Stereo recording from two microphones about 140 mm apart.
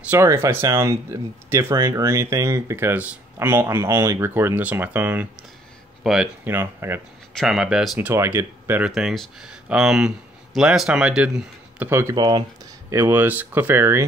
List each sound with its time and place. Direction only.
0.1 s speech: 20° right (ahead or behind)
6.0 s speech: centre (ahead or behind)
6.4 s speech: 15° right (ahead or behind)
7.3 s speech: 5° right (ahead or behind)
8.1 s speech: 20° right (ahead or behind)
8.9 s speech: centre (ahead or behind); by 12.4 s 25° right (ahead or behind)
12.9 s speech: 15° right (ahead or behind)